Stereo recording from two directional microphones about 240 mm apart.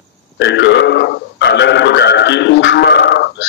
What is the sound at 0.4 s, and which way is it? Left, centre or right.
Speech, left.